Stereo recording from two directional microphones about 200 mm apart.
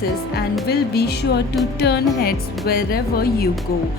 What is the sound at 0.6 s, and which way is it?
Speech, 50° left (ahead or behind).